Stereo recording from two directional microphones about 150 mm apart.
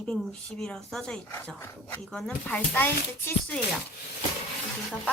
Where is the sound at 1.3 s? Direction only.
15° left (ahead or behind).